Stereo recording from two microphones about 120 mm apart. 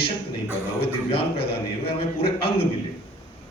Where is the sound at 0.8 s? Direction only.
50° left (ahead or behind).